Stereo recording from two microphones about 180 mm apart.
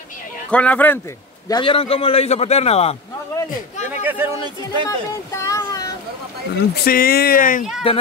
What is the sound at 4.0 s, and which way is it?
Speech, 10° right (ahead or behind).